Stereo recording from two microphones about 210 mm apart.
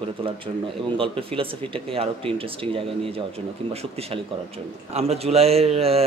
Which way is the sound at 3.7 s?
30° right (ahead or behind).